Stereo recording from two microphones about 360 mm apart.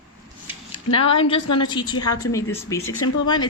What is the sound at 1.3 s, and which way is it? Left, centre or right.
A woman's voice, centre.